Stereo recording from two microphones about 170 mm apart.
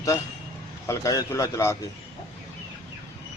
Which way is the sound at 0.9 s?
15° left (ahead or behind).